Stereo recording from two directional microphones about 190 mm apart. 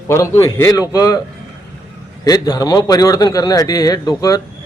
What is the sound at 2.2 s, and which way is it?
A man's voice, 20° left (ahead or behind).